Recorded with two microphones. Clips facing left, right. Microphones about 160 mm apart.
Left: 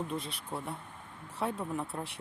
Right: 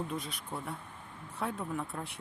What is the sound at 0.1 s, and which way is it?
Speech, centre (ahead or behind).